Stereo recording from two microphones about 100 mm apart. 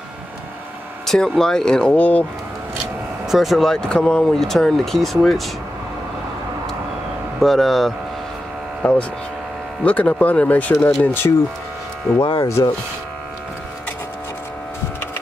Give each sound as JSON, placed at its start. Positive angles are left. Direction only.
{"t": 1.0, "sound": "speech", "side_deg": 5}
{"t": 3.3, "sound": "speech", "side_deg": 0}
{"t": 7.3, "sound": "speech", "side_deg": 0}
{"t": 9.8, "sound": "speech", "side_deg": 15}
{"t": 12.4, "sound": "speech", "side_deg": 30}